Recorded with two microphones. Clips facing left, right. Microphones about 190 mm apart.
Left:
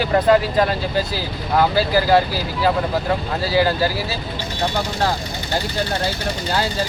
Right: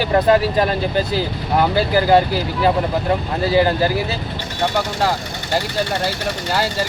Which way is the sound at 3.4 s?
20° right (ahead or behind).